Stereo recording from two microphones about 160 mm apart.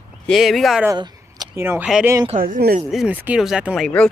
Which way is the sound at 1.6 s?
15° right (ahead or behind).